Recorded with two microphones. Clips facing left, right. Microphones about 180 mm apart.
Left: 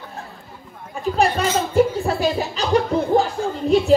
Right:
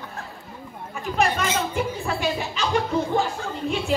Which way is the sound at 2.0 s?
35° left (ahead or behind).